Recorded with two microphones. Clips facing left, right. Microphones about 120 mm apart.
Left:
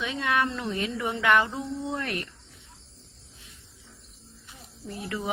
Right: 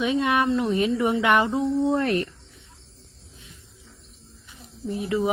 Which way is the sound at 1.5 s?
30° right (ahead or behind).